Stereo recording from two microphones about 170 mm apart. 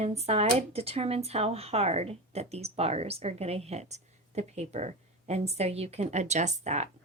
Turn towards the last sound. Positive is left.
turn(degrees=-45)  # may be behind; listen again after turning